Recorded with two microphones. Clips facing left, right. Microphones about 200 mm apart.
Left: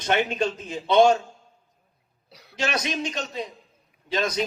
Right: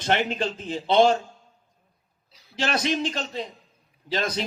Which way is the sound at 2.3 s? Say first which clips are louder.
Left 8 dB; 70° left (ahead or behind).